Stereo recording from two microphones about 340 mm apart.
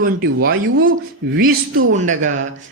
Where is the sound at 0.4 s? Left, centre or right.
Right.